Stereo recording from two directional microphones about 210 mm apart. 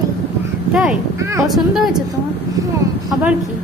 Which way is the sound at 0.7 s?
5° right (ahead or behind).